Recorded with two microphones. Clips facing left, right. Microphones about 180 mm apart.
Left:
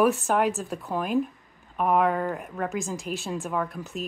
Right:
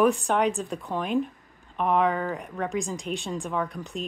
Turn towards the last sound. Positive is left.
turn(degrees=5)  # may be behind; listen again after turning